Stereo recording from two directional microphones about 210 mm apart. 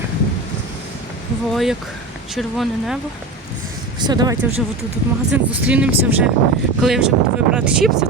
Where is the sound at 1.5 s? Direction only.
Centre (ahead or behind).